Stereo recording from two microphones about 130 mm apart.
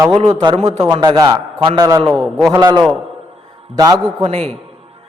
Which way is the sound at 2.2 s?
5° left (ahead or behind).